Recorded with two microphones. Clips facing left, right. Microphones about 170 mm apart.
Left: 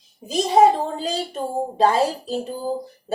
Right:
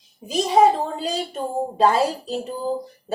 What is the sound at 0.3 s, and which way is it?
A woman's voice, 40° left (ahead or behind).